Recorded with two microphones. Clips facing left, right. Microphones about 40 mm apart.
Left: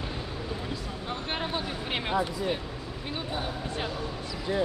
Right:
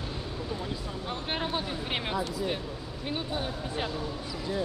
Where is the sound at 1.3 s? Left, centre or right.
Centre.